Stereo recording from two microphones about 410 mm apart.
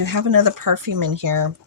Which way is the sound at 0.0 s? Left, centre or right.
Right.